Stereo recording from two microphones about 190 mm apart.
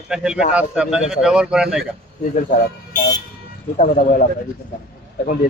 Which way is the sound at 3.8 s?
45° left (ahead or behind).